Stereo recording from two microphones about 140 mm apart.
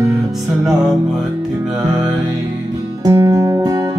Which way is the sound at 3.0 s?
20° right (ahead or behind).